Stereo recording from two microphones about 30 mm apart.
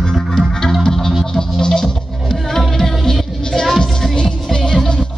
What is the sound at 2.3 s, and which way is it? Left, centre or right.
Music, centre.